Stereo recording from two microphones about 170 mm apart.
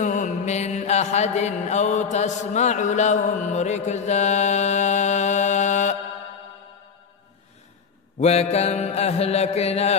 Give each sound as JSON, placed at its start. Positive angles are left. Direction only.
{"t": 0.0, "sound": "mantra", "side_deg": 45}
{"t": 8.2, "sound": "mantra", "side_deg": 40}